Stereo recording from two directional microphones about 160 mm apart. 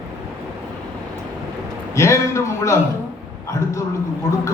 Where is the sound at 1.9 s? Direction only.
20° left (ahead or behind).